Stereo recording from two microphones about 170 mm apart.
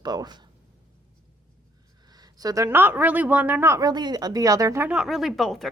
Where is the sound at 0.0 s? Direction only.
25° right (ahead or behind).